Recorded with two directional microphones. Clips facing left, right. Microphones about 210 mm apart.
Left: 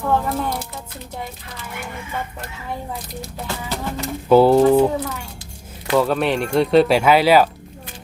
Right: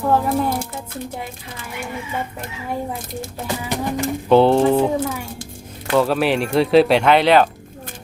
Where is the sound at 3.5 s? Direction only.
15° right (ahead or behind).